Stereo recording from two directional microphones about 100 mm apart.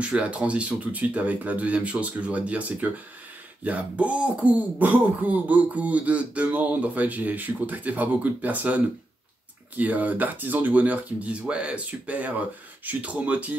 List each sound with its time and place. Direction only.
0.0 s speech: 10° right (ahead or behind)